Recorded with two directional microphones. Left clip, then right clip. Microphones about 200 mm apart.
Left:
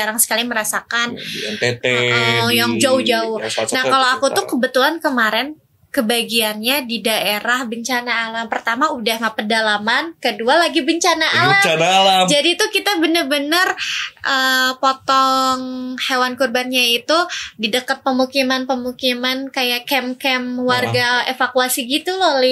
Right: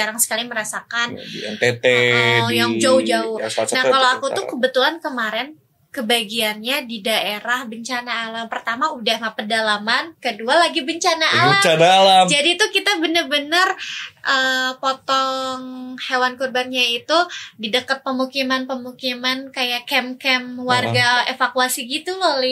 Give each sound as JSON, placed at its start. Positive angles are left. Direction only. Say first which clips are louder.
{"t": 0.0, "sound": "a woman's voice", "louder": "left 3 dB", "side_deg": 45}
{"t": 1.6, "sound": "a sound", "louder": "right 2 dB", "side_deg": -20}
{"t": 2.4, "sound": "a woman's voice", "louder": "left 2 dB", "side_deg": 45}
{"t": 11.6, "sound": "speech", "louder": "right 1 dB", "side_deg": -20}
{"t": 12.3, "sound": "a woman's voice", "louder": "left 1 dB", "side_deg": 40}